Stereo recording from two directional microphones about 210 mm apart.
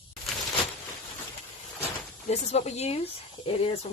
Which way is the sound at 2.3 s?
30° left (ahead or behind).